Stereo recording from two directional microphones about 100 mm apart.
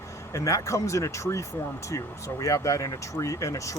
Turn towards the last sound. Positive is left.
turn(degrees=30)  # may be behind; listen again after turning